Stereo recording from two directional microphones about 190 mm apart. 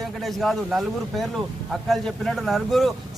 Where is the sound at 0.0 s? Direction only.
Centre (ahead or behind).